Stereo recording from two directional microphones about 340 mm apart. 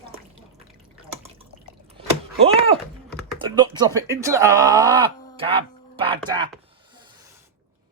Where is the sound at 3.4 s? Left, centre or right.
Centre.